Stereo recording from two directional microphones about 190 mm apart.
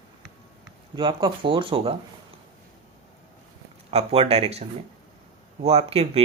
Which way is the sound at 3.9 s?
35° right (ahead or behind).